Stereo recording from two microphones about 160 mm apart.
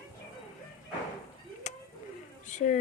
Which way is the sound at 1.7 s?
45° left (ahead or behind).